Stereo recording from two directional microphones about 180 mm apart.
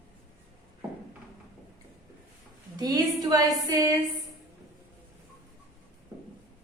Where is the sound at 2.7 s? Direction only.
20° right (ahead or behind).